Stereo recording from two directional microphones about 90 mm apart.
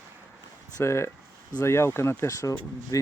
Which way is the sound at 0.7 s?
30° left (ahead or behind).